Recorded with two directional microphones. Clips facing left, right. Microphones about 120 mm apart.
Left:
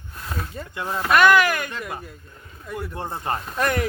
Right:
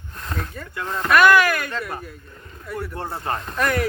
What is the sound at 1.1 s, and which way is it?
Speech, 25° left (ahead or behind).